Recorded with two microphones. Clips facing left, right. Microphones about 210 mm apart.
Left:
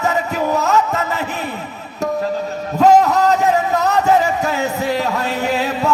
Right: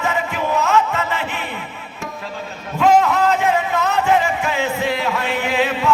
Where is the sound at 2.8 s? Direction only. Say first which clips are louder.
Left 3 dB; 40° left (ahead or behind).